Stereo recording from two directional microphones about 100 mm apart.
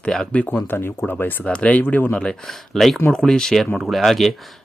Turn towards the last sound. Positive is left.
turn(degrees=0)  # may be behind; listen again after turning